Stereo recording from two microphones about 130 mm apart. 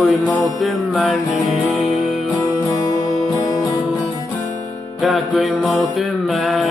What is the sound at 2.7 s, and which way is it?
Music, 25° left (ahead or behind).